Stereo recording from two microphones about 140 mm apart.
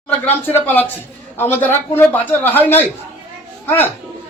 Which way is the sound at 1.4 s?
15° left (ahead or behind).